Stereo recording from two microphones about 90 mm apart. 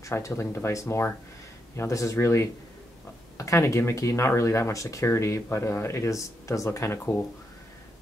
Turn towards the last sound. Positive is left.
turn(degrees=30)  # may be behind; listen again after turning